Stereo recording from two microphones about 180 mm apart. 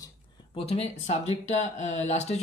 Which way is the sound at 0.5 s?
35° left (ahead or behind).